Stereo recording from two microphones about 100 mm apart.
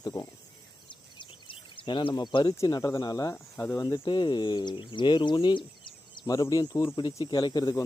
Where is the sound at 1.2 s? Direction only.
60° left (ahead or behind).